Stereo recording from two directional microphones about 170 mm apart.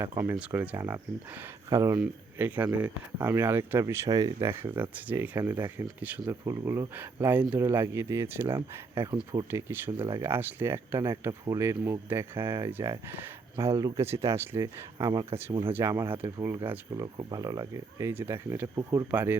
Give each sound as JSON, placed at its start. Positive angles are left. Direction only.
{"t": 0.0, "sound": "speech", "side_deg": -20}
{"t": 9.1, "sound": "speech", "side_deg": -25}
{"t": 9.5, "sound": "speech", "side_deg": -15}
{"t": 16.9, "sound": "speech", "side_deg": -25}